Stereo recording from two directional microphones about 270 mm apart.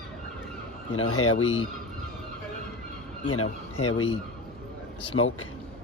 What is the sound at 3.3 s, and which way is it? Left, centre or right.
Speech, left.